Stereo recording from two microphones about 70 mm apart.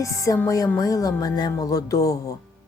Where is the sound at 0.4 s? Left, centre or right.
Left.